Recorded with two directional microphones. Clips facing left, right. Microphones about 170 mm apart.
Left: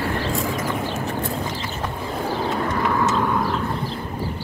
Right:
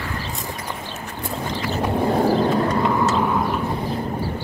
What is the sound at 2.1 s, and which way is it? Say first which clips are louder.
Bird: right 8 dB; 60° right (ahead or behind).